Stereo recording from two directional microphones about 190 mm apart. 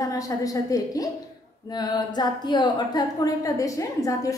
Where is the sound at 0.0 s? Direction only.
20° left (ahead or behind).